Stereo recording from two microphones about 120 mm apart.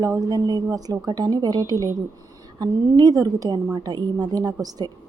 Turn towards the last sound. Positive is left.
turn(degrees=-30)  # may be behind; listen again after turning